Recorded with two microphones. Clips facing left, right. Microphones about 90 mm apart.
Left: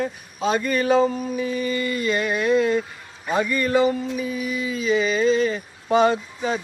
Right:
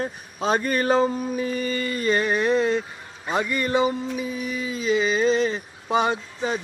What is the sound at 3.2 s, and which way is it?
Speech, 20° right (ahead or behind).